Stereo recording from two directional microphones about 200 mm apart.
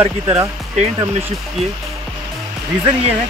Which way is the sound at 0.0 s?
15° right (ahead or behind).